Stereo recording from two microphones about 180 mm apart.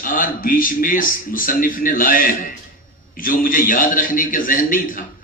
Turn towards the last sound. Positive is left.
turn(degrees=50)  # may be behind; listen again after turning